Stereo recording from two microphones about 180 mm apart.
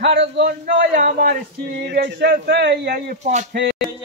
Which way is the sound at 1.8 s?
65° right (ahead or behind).